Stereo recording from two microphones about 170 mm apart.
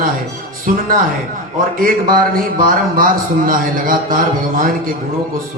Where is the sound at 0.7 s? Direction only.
50° right (ahead or behind).